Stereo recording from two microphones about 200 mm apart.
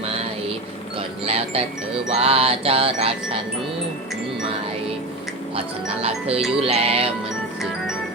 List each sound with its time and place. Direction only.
0.9 s music: 30° right (ahead or behind)
6.0 s music: 30° right (ahead or behind)